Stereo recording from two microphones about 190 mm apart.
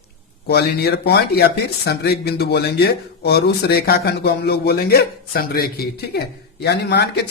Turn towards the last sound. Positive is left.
turn(degrees=60)  # may be behind; listen again after turning